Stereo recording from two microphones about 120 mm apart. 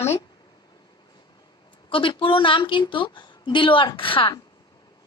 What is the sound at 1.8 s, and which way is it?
A woman's voice, 45° left (ahead or behind).